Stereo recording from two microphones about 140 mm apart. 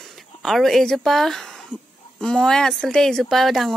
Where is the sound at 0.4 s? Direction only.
Centre (ahead or behind).